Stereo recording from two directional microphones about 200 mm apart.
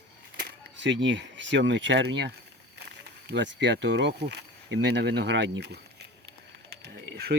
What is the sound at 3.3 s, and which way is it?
Speech, 60° right (ahead or behind).